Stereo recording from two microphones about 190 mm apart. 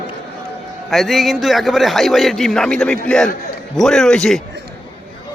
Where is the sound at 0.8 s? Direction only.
Centre (ahead or behind).